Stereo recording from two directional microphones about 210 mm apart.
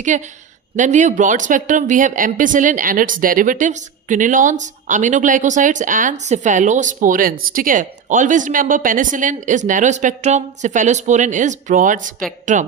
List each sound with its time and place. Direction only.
0.1 s speech: 35° right (ahead or behind)